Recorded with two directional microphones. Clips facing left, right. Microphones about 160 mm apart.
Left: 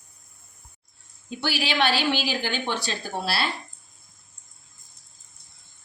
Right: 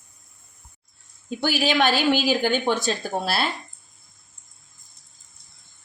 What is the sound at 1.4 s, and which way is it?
A woman's voice, 45° right (ahead or behind).